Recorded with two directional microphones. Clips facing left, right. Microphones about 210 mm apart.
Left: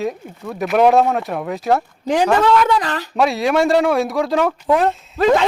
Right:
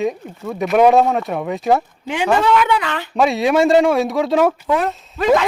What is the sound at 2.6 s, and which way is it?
Speech, 40° left (ahead or behind).